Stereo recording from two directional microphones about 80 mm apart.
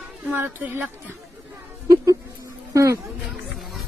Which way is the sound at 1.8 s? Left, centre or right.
Right.